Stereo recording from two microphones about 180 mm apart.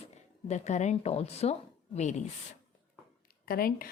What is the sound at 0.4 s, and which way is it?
A woman's voice, 40° left (ahead or behind).